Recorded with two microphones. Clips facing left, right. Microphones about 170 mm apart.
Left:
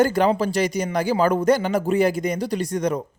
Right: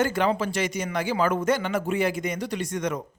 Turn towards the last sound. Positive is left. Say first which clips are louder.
# left 5 dB
turn(degrees=35)  # may be behind; listen again after turning